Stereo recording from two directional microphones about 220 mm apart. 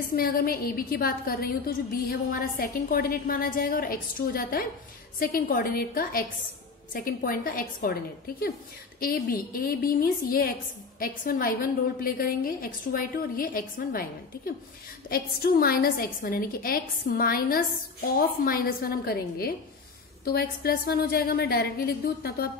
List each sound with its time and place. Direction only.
0.1 s a woman's voice: 40° left (ahead or behind)